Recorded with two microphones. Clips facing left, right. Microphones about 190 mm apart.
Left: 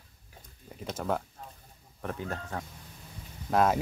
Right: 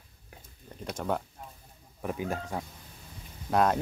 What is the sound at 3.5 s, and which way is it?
Speech, centre (ahead or behind).